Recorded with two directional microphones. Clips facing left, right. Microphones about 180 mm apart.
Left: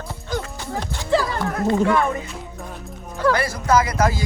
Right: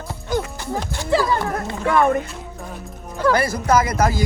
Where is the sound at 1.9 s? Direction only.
55° right (ahead or behind).